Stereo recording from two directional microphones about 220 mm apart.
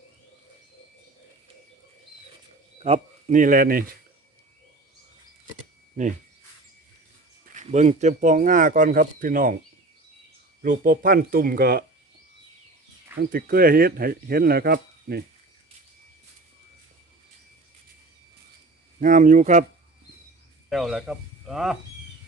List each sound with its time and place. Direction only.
2.8 s speech: 30° right (ahead or behind)
7.5 s speech: 30° right (ahead or behind)
10.6 s speech: 40° right (ahead or behind)
13.3 s speech: 40° right (ahead or behind)
18.9 s speech: 35° right (ahead or behind)
20.7 s speech: centre (ahead or behind)